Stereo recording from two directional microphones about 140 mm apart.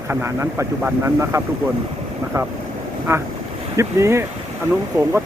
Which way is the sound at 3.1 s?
20° right (ahead or behind).